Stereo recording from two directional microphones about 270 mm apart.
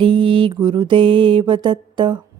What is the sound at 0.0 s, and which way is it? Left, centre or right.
Mantra, centre.